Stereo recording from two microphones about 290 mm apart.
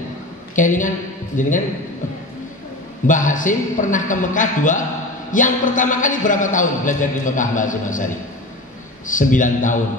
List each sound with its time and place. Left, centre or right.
0.6 s a woman's voice: left
3.1 s a man's voice: left